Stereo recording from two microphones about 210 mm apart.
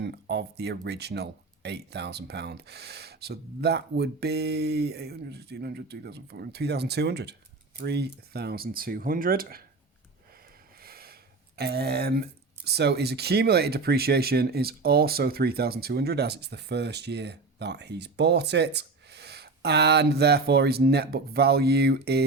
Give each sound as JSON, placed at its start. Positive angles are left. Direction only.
{"t": 0.0, "sound": "speech", "side_deg": -55}
{"t": 10.8, "sound": "speech", "side_deg": -45}